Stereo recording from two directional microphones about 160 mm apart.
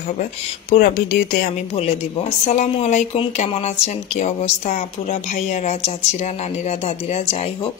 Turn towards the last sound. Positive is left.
turn(degrees=40)  # may be behind; listen again after turning